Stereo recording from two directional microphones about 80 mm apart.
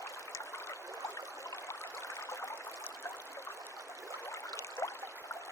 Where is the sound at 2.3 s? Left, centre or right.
Left.